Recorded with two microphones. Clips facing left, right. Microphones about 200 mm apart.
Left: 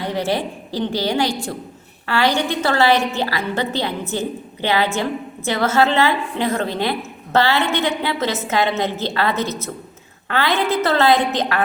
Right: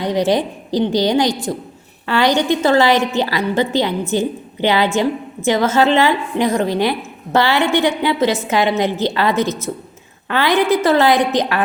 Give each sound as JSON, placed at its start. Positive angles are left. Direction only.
{"t": 0.0, "sound": "a woman's voice", "side_deg": -15}